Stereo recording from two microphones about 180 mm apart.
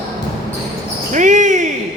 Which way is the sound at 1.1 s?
45° right (ahead or behind).